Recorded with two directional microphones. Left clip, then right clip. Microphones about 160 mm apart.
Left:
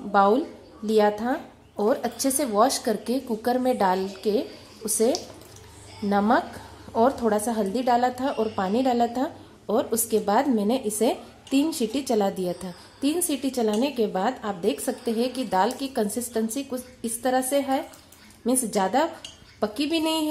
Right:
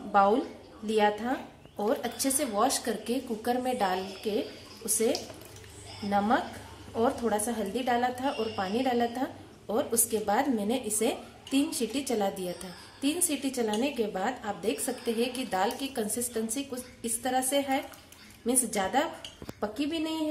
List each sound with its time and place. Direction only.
0.1 s a woman's voice: 50° left (ahead or behind)
8.3 s a woman's voice: 40° left (ahead or behind)